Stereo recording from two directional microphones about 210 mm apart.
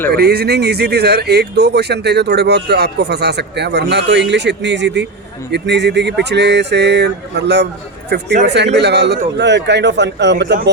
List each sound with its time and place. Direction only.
0.1 s speech: 50° right (ahead or behind)